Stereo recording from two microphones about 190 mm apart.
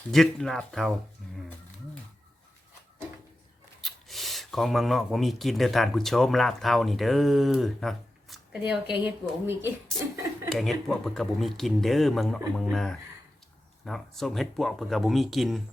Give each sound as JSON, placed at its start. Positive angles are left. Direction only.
{"t": 0.1, "sound": "speech", "side_deg": 0}
{"t": 3.8, "sound": "speech", "side_deg": 0}
{"t": 10.0, "sound": "a sound", "side_deg": -15}
{"t": 10.5, "sound": "speech", "side_deg": 0}